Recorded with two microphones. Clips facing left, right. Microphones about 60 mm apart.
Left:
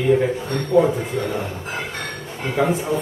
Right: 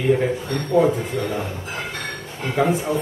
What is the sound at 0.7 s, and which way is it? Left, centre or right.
Speech, centre.